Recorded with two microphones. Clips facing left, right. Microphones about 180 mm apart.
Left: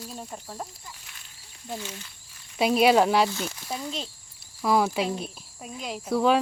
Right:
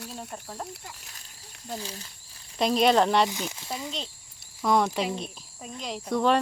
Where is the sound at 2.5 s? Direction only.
5° left (ahead or behind).